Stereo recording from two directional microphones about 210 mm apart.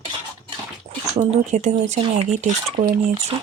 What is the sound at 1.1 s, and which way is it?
Speech, 30° right (ahead or behind).